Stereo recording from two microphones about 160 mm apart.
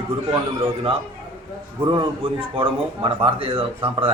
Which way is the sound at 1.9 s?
30° right (ahead or behind).